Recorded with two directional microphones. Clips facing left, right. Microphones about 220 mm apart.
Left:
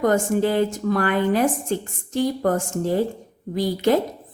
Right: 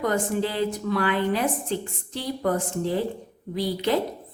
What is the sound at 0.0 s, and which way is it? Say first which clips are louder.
Speech: left 5 dB; 45° left (ahead or behind).